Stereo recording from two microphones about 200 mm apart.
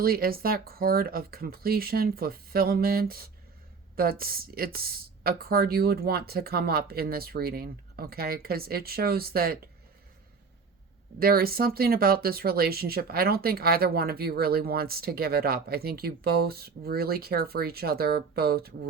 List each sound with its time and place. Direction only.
0.0 s speech: 50° right (ahead or behind)
11.2 s speech: 50° right (ahead or behind)